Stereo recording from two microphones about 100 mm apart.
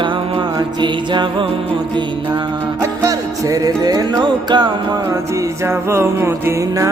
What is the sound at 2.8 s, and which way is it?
Music, 35° right (ahead or behind).